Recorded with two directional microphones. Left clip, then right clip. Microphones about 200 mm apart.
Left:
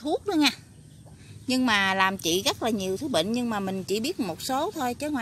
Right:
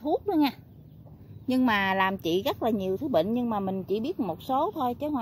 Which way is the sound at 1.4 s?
5° right (ahead or behind).